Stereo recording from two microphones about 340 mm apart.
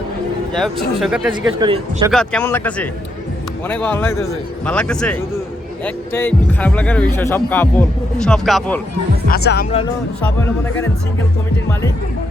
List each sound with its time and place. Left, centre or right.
0.5 s speech: centre
1.5 s a man's voice: centre
2.0 s speech: centre
9.3 s speech: left
10.2 s speech: centre